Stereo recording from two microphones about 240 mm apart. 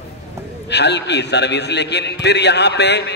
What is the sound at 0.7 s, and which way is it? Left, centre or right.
A man's voice, left.